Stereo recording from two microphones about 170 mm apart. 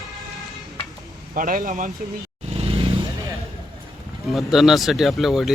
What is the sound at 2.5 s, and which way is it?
Vehicle, 35° right (ahead or behind).